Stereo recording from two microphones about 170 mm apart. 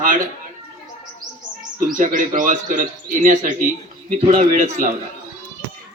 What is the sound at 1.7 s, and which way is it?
Speech, 50° right (ahead or behind).